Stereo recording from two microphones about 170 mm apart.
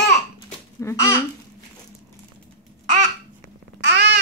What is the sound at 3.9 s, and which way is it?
Babbling, 90° right.